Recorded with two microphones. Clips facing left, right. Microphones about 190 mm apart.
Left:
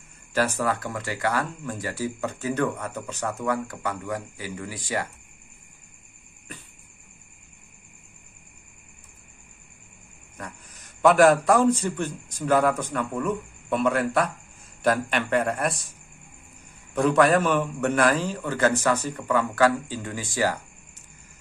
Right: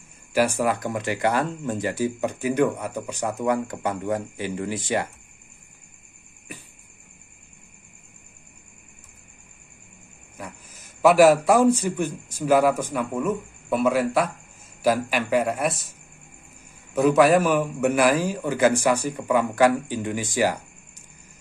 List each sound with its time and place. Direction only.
0.3 s speech: 10° right (ahead or behind)
6.5 s cricket: 10° right (ahead or behind)
10.3 s a man's voice: 5° right (ahead or behind)
16.9 s a man's voice: 5° right (ahead or behind)